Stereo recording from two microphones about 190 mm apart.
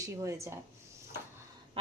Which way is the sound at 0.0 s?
15° right (ahead or behind).